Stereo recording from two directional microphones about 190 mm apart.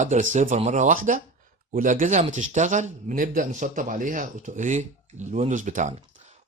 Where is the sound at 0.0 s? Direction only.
40° right (ahead or behind).